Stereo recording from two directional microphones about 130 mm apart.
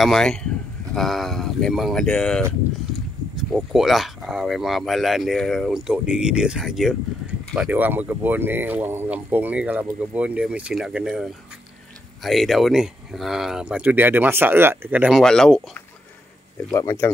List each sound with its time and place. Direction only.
0.0 s speech: 5° left (ahead or behind)
15.2 s speech: 5° left (ahead or behind)
16.7 s speech: 20° left (ahead or behind)